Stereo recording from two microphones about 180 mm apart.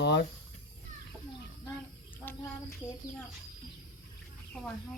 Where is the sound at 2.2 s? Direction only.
15° left (ahead or behind).